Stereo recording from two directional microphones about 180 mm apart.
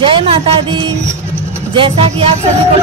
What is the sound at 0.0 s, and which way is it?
Speech, 30° right (ahead or behind).